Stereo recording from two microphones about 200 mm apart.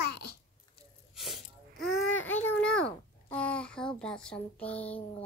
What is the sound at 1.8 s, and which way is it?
A child's voice, 5° left (ahead or behind).